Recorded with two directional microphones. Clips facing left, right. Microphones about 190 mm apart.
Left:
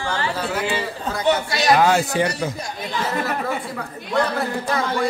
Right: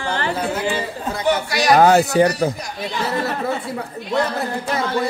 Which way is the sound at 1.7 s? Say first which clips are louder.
Right 7 dB; 40° right (ahead or behind).